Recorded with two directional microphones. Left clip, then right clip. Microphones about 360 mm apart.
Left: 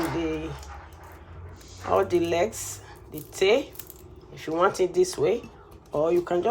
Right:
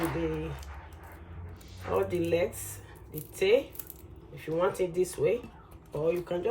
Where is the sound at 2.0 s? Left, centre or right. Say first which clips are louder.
Left 4 dB; centre.